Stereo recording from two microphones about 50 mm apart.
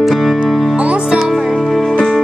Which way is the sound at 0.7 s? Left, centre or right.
Right.